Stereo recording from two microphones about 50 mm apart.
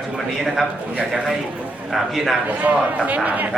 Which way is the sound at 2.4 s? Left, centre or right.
Right.